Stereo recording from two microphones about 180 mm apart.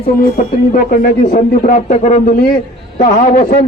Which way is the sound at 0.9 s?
50° left (ahead or behind).